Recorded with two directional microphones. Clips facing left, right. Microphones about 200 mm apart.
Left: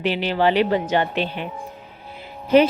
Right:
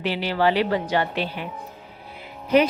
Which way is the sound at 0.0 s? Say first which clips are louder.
Left 2 dB; 20° left (ahead or behind).